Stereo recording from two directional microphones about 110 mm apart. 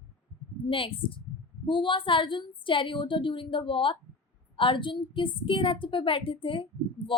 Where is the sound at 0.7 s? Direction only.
55° left (ahead or behind).